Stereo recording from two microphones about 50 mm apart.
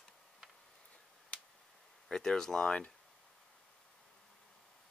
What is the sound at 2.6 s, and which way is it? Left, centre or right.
Speech, left.